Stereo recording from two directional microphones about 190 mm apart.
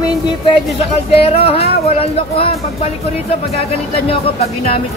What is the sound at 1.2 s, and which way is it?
Speech, 30° left (ahead or behind).